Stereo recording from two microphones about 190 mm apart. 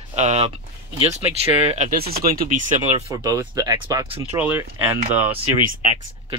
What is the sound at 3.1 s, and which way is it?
Speech, 20° right (ahead or behind).